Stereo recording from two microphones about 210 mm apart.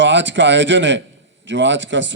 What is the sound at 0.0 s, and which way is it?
A man's voice, 60° right (ahead or behind).